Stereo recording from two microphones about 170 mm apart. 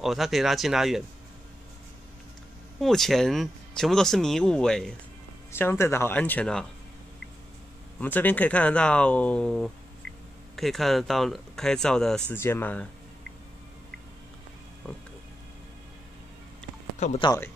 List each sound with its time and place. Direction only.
0.0 s speech: centre (ahead or behind)
2.8 s speech: centre (ahead or behind)
5.5 s speech: 15° left (ahead or behind)
8.0 s speech: 10° left (ahead or behind)
17.0 s speech: 45° left (ahead or behind)